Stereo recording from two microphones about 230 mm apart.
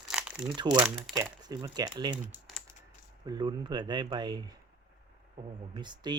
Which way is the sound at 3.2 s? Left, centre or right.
Centre.